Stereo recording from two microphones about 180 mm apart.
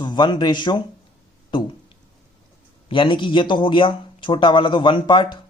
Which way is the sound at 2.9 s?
25° left (ahead or behind).